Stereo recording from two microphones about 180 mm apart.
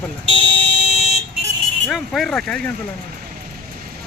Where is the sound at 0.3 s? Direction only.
30° left (ahead or behind).